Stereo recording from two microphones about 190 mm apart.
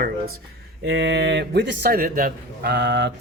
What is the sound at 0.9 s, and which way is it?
Speech, 65° right (ahead or behind).